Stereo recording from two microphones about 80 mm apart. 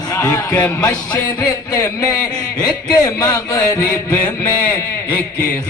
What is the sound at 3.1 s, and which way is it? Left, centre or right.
A man's voice, left.